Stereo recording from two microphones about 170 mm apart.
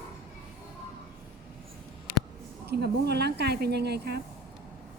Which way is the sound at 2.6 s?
70° right (ahead or behind).